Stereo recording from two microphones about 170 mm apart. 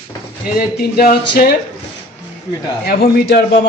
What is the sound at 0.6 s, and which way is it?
Speech, 65° left (ahead or behind).